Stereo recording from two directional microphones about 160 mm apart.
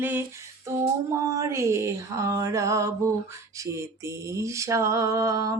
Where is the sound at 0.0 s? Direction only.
15° right (ahead or behind).